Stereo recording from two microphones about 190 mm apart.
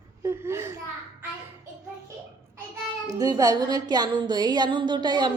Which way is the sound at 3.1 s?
20° right (ahead or behind).